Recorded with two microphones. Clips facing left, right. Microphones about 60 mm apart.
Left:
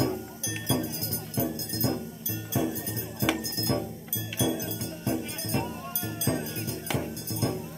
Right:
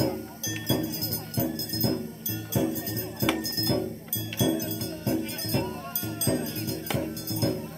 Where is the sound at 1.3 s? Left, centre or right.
Left.